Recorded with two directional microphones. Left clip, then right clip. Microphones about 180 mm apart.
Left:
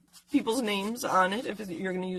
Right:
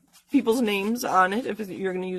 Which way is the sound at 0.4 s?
45° right (ahead or behind).